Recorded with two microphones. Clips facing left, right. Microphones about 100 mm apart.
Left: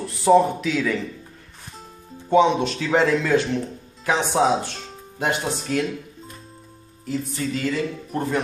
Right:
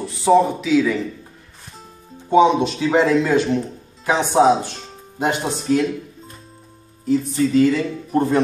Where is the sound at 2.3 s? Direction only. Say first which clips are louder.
Right 3 dB; 20° right (ahead or behind).